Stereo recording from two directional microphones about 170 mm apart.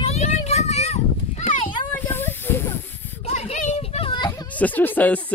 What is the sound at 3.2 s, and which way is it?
Children playing, 45° left (ahead or behind).